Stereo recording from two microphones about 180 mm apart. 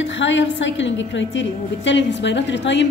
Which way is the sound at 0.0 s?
90° left.